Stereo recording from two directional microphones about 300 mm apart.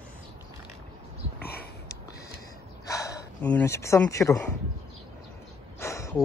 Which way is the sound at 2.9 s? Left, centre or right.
Centre.